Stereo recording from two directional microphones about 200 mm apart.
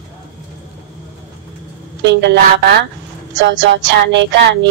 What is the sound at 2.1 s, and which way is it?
Speech, 60° right (ahead or behind).